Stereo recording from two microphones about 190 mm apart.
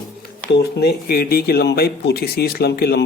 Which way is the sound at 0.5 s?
60° left (ahead or behind).